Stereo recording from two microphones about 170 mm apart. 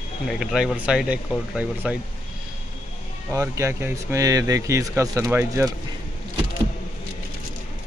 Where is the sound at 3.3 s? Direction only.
15° right (ahead or behind).